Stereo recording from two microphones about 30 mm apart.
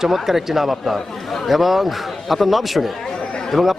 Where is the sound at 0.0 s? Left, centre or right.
Centre.